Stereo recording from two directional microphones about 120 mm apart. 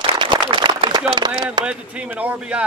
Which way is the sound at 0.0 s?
45° right (ahead or behind).